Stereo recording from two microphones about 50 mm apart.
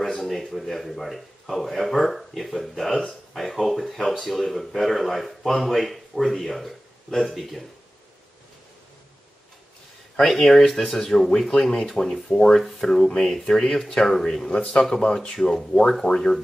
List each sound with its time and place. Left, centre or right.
0.2 s speech: centre
10.1 s speech: centre
14.5 s speech: left
16.0 s speech: centre